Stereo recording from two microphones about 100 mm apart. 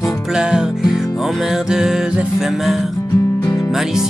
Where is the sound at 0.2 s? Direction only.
5° right (ahead or behind).